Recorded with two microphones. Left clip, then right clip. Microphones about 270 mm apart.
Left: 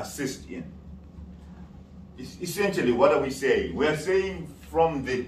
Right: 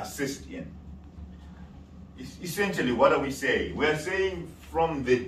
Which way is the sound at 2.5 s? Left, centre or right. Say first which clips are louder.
Left 3 dB; left.